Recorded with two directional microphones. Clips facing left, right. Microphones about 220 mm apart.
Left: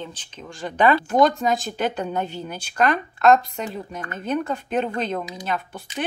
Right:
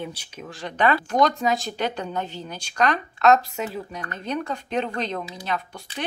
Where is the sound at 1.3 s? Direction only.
Centre (ahead or behind).